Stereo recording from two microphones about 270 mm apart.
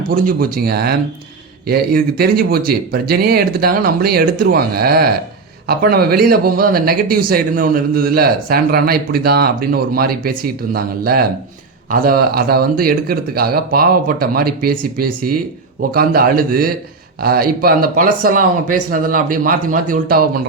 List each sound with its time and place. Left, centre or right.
0.1 s speech: right